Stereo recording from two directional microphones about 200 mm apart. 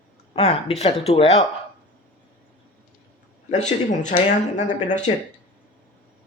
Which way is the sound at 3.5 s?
35° left (ahead or behind).